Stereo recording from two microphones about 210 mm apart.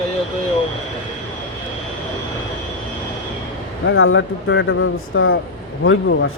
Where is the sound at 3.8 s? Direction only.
70° left (ahead or behind).